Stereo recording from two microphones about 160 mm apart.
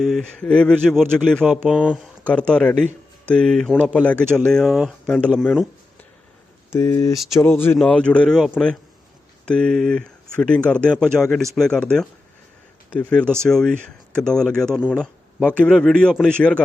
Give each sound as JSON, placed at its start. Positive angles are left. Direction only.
{"t": 0.0, "sound": "speech", "side_deg": 0}
{"t": 1.6, "sound": "speech", "side_deg": -5}
{"t": 2.2, "sound": "speech", "side_deg": 5}
{"t": 6.7, "sound": "speech", "side_deg": 20}
{"t": 13.1, "sound": "speech", "side_deg": 5}